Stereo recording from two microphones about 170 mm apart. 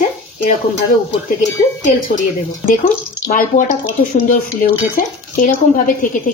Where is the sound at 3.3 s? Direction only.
55° left (ahead or behind).